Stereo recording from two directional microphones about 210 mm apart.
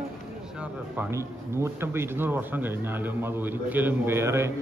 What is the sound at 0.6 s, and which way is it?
Speech, 10° right (ahead or behind).